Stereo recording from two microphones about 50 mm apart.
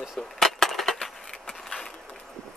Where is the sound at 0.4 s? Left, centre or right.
Centre.